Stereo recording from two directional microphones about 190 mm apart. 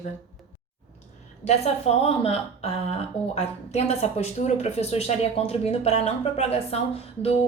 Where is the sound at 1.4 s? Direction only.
30° left (ahead or behind).